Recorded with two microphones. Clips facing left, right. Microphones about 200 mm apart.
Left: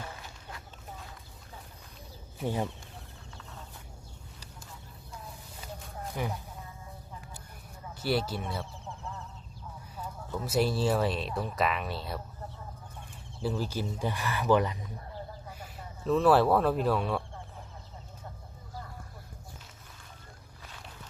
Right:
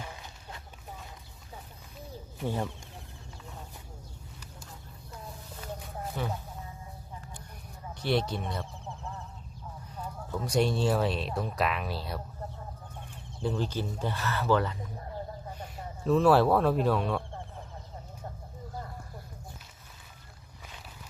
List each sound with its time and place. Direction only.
2.5 s speech: 15° left (ahead or behind)
6.2 s speech: 15° left (ahead or behind)
7.9 s speech: 5° left (ahead or behind)
8.8 s duck: 15° right (ahead or behind)
10.4 s speech: 5° left (ahead or behind)
13.4 s speech: 5° left (ahead or behind)
15.5 s speech: centre (ahead or behind)